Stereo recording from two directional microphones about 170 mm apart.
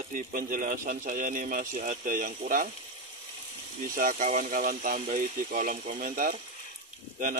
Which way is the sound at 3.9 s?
50° right (ahead or behind).